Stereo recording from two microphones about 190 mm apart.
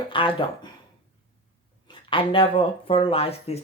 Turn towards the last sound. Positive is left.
turn(degrees=30)  # may be behind; listen again after turning